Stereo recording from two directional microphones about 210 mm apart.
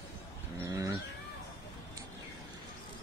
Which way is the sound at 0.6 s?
15° right (ahead or behind).